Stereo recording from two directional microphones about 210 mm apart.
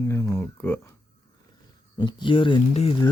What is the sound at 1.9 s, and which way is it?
Speech, 20° left (ahead or behind).